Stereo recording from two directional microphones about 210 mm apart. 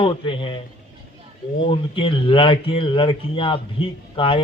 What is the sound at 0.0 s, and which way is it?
Speech, 25° left (ahead or behind).